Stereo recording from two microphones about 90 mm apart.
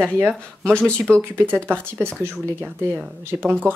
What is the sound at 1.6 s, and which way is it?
Speech, 25° right (ahead or behind).